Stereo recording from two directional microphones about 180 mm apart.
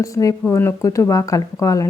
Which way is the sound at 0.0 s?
20° left (ahead or behind).